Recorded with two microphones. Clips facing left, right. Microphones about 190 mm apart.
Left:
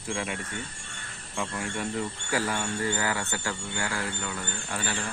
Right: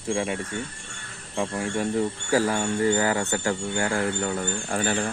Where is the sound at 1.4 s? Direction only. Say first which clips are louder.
Right 6 dB; 30° right (ahead or behind).